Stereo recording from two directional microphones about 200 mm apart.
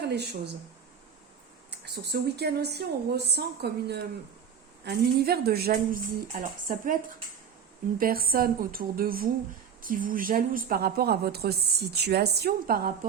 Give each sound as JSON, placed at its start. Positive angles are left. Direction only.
{"t": 0.0, "sound": "speech", "side_deg": -55}
{"t": 1.8, "sound": "speech", "side_deg": -55}